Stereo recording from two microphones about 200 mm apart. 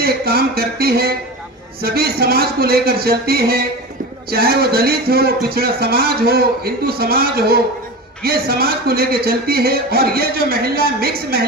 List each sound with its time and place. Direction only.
0.0 s speech: 50° right (ahead or behind)